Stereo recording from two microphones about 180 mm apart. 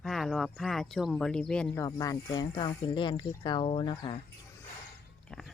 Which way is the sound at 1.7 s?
20° left (ahead or behind).